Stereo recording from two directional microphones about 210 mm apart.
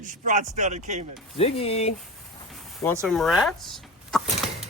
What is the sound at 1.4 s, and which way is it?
Speech, 30° left (ahead or behind).